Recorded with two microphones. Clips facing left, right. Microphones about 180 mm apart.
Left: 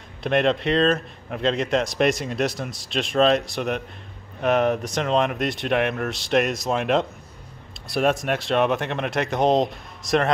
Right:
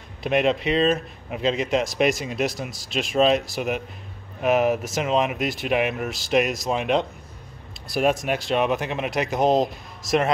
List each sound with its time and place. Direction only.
0.2 s speech: centre (ahead or behind)